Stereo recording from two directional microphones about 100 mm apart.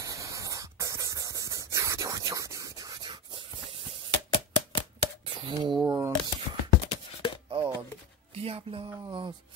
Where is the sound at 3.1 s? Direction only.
60° right (ahead or behind).